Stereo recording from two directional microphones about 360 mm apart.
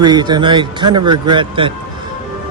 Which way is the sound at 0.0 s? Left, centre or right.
Centre.